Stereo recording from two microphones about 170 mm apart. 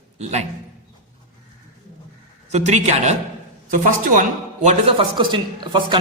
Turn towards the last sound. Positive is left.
turn(degrees=-25)  # may be behind; listen again after turning